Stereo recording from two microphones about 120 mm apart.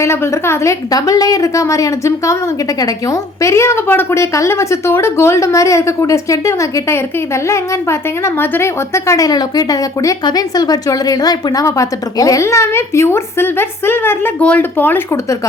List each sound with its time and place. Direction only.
0.0 s speech: 20° left (ahead or behind)